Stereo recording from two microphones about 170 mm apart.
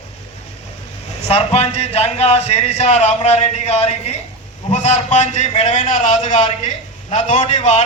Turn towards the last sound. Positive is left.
turn(degrees=40)  # may be behind; listen again after turning